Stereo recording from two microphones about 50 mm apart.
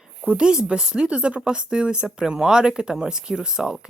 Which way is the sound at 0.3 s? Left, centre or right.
Centre.